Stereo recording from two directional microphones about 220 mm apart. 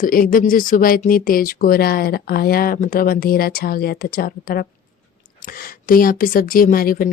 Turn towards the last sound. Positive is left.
turn(degrees=40)  # may be behind; listen again after turning